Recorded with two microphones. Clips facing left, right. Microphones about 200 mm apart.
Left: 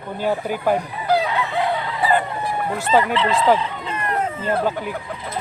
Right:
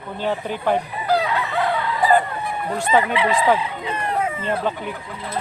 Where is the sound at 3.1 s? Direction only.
10° right (ahead or behind).